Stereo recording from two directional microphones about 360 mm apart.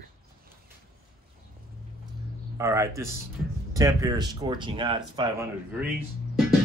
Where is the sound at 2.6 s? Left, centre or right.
Centre.